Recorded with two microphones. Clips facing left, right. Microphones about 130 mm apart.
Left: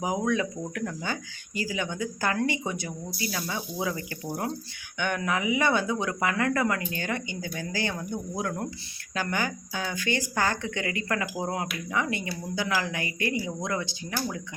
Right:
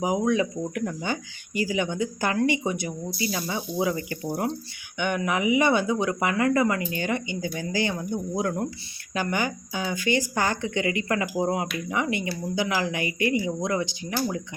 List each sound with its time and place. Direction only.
0.0 s speech: 15° right (ahead or behind)